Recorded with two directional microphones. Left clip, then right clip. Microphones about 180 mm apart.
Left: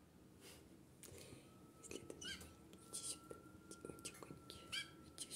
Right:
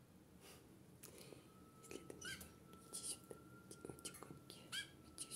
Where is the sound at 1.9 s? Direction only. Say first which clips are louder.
Left 1 dB; 5° right (ahead or behind).